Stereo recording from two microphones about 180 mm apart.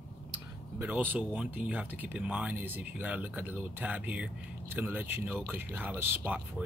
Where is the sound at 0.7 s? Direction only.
10° right (ahead or behind).